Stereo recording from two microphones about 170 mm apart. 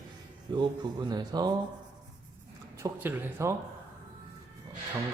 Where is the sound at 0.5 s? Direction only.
25° right (ahead or behind).